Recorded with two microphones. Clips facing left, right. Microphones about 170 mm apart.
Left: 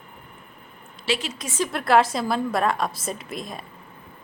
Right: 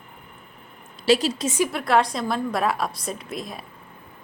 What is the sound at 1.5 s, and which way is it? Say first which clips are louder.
Speech: right 2 dB; 15° right (ahead or behind).